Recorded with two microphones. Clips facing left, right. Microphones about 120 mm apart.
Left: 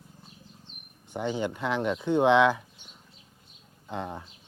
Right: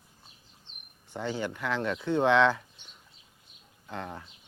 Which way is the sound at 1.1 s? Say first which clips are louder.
Left 3 dB; 15° left (ahead or behind).